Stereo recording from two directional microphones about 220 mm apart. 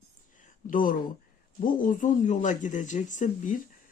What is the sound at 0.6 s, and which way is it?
Speech, 40° left (ahead or behind).